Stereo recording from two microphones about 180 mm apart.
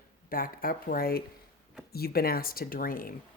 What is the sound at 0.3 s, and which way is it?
Speech, 55° left (ahead or behind).